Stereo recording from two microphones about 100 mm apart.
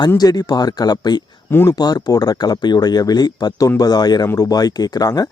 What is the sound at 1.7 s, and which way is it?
Speech, 40° left (ahead or behind).